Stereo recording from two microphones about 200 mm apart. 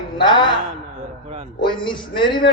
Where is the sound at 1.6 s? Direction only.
25° left (ahead or behind).